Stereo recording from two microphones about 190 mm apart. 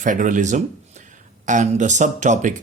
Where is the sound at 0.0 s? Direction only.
40° right (ahead or behind).